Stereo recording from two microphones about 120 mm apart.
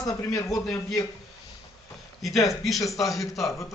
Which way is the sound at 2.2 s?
Centre (ahead or behind).